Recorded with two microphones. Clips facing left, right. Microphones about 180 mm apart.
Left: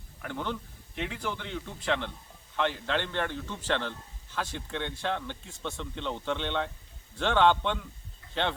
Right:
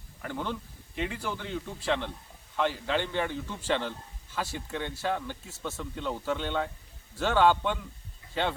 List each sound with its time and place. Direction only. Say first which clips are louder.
0.2 s a man's voice: even; 10° right (ahead or behind)